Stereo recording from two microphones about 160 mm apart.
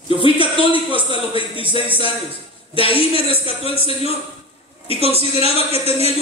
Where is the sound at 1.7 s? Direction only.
35° left (ahead or behind).